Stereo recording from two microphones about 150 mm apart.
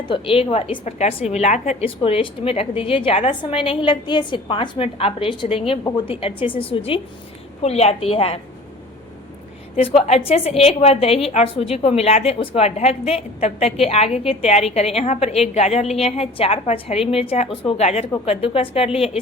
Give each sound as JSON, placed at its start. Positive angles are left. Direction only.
{"t": 0.1, "sound": "a woman's voice", "side_deg": 40}
{"t": 2.0, "sound": "a woman's voice", "side_deg": 35}
{"t": 10.1, "sound": "a woman's voice", "side_deg": 45}